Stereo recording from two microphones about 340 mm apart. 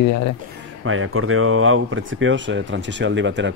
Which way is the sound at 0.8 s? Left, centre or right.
Right.